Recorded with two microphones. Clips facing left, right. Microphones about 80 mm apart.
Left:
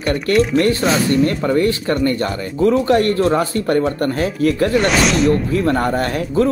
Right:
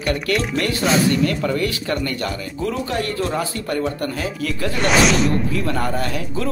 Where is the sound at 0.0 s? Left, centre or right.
Left.